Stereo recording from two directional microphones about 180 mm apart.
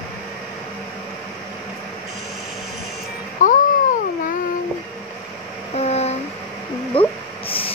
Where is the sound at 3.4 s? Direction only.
45° left (ahead or behind).